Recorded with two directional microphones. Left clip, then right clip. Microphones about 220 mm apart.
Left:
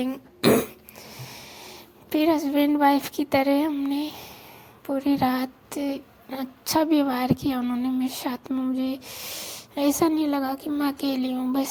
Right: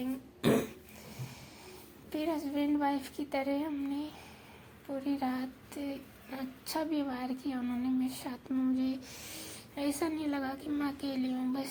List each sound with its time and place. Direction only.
0.0 s cough: 35° left (ahead or behind)
1.1 s a child's voice: 30° left (ahead or behind)